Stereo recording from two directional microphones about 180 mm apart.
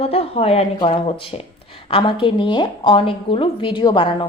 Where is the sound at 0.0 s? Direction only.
30° left (ahead or behind).